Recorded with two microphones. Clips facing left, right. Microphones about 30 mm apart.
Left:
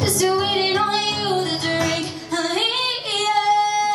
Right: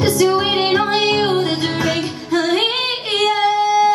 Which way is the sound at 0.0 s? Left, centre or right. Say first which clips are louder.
Right 4 dB; centre.